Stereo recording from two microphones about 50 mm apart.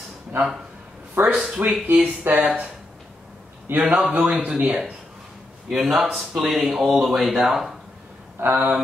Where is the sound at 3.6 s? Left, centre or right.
Right.